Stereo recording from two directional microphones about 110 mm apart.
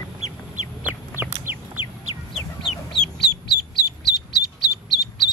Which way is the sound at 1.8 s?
20° right (ahead or behind).